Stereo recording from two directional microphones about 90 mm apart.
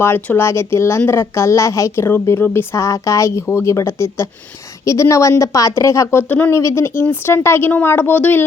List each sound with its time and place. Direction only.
0.3 s a woman's voice: 30° left (ahead or behind)
6.5 s speech: 35° left (ahead or behind)